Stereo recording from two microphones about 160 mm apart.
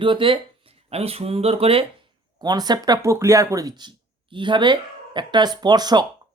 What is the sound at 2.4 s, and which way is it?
Speech, 25° right (ahead or behind).